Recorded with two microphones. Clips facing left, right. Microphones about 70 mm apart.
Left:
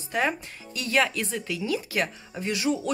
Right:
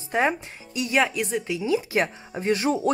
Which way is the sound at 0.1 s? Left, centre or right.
Centre.